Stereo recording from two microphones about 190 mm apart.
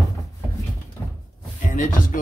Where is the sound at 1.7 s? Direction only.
45° left (ahead or behind).